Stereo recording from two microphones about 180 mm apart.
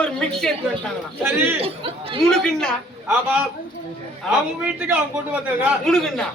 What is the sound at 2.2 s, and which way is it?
Speech, 5° left (ahead or behind).